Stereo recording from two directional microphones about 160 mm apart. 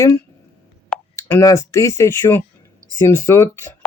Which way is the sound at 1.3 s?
15° left (ahead or behind).